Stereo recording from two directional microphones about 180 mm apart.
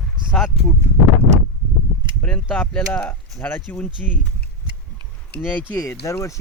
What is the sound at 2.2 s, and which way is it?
Speech, 5° left (ahead or behind).